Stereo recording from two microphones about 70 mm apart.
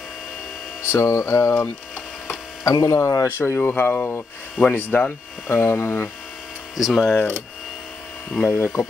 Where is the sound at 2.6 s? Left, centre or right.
Left.